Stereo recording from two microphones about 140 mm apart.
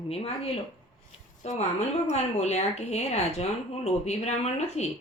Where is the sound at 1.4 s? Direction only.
60° left (ahead or behind).